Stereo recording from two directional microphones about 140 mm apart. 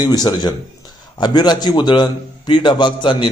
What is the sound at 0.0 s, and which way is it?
A man's voice, 30° left (ahead or behind).